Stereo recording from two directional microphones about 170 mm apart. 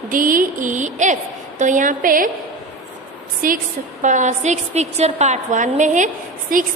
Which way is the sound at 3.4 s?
50° right (ahead or behind).